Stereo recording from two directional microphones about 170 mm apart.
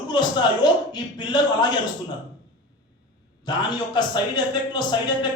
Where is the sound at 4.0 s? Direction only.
25° left (ahead or behind).